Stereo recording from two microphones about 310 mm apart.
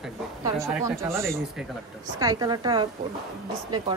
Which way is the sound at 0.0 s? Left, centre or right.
Centre.